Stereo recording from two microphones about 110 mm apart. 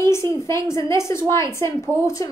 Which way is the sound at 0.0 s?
25° left (ahead or behind).